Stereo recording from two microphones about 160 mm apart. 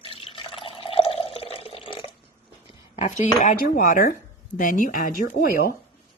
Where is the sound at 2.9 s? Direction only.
50° left (ahead or behind).